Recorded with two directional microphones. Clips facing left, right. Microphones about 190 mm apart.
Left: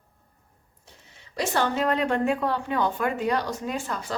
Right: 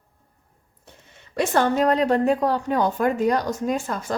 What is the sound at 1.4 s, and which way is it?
A woman's voice, 50° right (ahead or behind).